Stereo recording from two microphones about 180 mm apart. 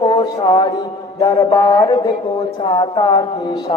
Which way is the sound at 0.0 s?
25° left (ahead or behind).